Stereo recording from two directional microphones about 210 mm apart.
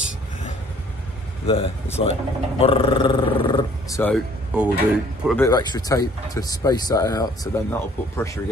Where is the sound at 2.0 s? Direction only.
25° left (ahead or behind).